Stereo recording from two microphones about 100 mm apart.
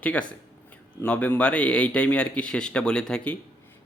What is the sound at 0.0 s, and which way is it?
A man's voice, 15° left (ahead or behind).